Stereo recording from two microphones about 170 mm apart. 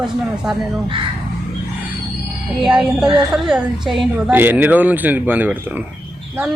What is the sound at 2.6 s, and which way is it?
A woman's voice, 5° right (ahead or behind).